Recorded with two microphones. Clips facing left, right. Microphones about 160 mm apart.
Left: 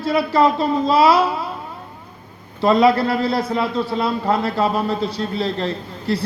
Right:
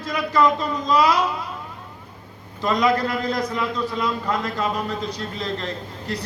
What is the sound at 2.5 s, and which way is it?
A man's voice, 35° left (ahead or behind).